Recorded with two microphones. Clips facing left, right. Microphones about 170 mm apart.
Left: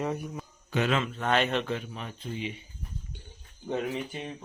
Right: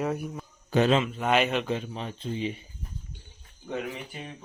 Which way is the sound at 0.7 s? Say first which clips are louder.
Right 5 dB; 35° right (ahead or behind).